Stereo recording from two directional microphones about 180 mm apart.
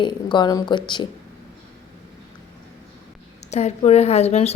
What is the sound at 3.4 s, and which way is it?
A woman's voice, 40° left (ahead or behind).